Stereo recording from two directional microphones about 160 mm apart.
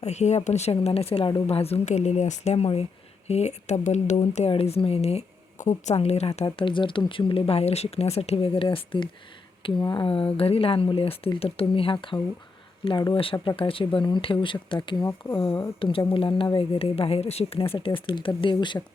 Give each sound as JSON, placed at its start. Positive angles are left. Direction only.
{"t": 0.0, "sound": "speech", "side_deg": 45}